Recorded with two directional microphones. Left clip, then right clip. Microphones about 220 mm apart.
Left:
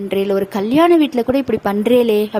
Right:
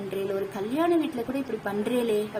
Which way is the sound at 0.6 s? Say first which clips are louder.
Left 13 dB; 45° left (ahead or behind).